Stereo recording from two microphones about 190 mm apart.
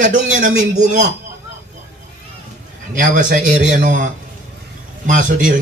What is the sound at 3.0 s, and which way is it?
A man's voice, 40° right (ahead or behind).